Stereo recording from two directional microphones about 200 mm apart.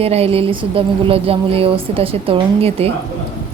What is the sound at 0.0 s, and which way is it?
Speech, 30° right (ahead or behind).